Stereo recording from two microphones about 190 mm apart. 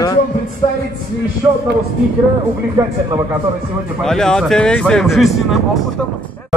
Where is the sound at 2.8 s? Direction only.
15° right (ahead or behind).